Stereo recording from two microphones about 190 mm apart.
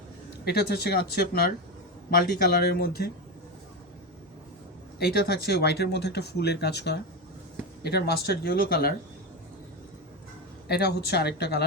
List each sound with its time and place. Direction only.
0.4 s speech: 55° left (ahead or behind)
4.9 s speech: 55° left (ahead or behind)
10.7 s speech: 60° left (ahead or behind)